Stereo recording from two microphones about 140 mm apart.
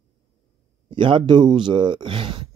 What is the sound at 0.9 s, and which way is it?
Speech, 35° right (ahead or behind).